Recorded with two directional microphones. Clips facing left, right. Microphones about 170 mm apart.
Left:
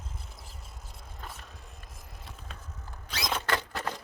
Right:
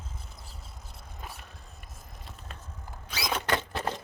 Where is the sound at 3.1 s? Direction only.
5° right (ahead or behind).